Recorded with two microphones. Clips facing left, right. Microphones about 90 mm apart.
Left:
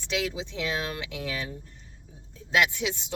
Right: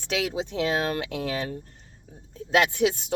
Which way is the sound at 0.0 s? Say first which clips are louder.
Right 3 dB; 45° right (ahead or behind).